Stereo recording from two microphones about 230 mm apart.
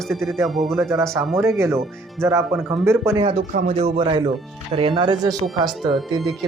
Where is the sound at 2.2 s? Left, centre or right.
Centre.